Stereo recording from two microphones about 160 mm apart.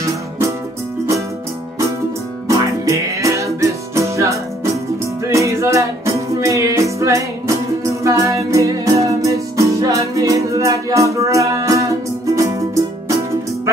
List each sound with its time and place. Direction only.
2.4 s music: 20° right (ahead or behind)